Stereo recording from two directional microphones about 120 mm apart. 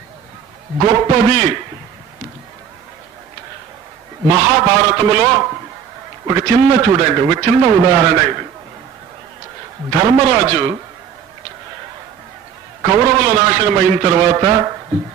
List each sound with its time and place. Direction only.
0.7 s a man's voice: 30° right (ahead or behind)
4.3 s a man's voice: 30° right (ahead or behind)
9.9 s a man's voice: 25° right (ahead or behind)
12.8 s a man's voice: 30° right (ahead or behind)